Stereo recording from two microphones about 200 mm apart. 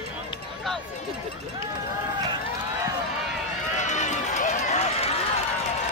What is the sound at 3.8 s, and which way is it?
Run, 35° left (ahead or behind).